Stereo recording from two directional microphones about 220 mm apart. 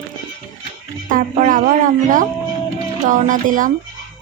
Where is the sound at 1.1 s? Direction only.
35° right (ahead or behind).